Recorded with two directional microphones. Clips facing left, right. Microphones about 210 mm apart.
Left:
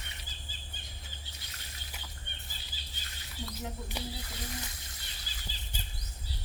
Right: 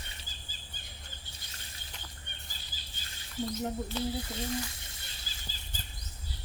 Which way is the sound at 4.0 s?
15° left (ahead or behind).